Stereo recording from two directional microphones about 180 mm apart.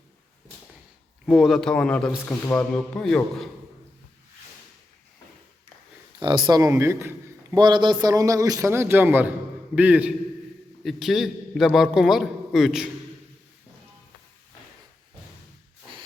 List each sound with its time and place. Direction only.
1.3 s a man's voice: centre (ahead or behind)
6.1 s a man's voice: 25° right (ahead or behind); by 12.9 s centre (ahead or behind)